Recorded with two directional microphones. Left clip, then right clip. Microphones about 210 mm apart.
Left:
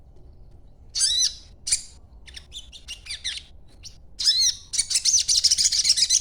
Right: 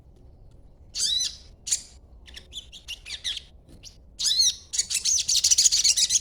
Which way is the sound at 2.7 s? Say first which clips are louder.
Left 2 dB; 10° right (ahead or behind).